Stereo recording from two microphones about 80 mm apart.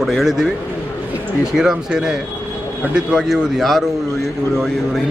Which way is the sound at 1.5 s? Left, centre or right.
Centre.